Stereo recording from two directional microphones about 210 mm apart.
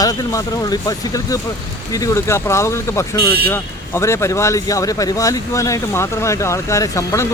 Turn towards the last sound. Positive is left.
turn(degrees=15)  # may be behind; listen again after turning